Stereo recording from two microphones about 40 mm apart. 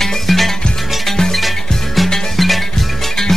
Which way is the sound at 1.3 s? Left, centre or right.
Centre.